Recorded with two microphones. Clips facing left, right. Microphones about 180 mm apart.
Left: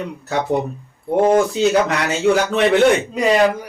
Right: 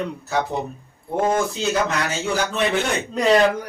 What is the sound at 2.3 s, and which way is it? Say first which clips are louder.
Speech: left 11 dB; 70° left (ahead or behind).